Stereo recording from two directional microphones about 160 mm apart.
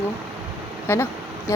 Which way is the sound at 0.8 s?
15° left (ahead or behind).